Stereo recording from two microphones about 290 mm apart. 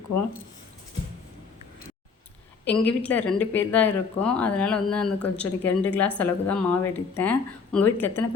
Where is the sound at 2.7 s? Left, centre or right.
Centre.